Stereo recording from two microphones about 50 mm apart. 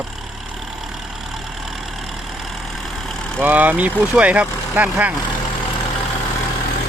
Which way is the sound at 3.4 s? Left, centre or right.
Right.